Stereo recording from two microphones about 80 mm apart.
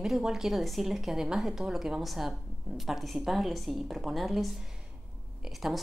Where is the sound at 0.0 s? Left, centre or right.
Centre.